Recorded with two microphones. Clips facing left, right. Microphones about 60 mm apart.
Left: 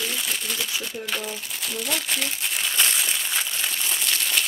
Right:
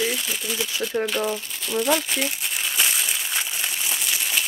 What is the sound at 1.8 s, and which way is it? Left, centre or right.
Crumpling, centre.